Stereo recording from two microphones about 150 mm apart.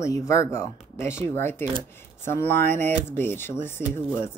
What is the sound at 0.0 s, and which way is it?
A woman's voice, 20° left (ahead or behind).